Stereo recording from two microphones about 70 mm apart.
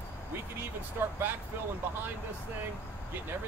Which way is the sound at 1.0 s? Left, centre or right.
Right.